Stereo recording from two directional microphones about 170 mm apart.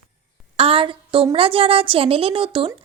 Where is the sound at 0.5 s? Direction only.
35° right (ahead or behind).